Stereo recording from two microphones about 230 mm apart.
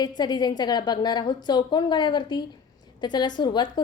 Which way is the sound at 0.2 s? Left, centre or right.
Centre.